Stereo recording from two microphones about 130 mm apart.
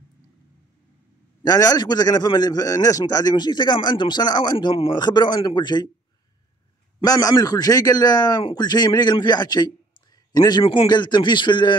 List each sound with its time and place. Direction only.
1.4 s a man's voice: 30° left (ahead or behind)
7.0 s a man's voice: 25° left (ahead or behind)